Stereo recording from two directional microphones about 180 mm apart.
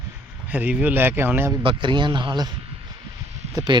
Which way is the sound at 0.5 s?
10° right (ahead or behind).